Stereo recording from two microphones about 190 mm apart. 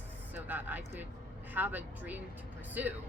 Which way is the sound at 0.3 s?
10° right (ahead or behind).